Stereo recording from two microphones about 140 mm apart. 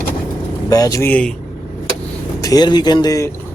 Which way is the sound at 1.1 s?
10° left (ahead or behind).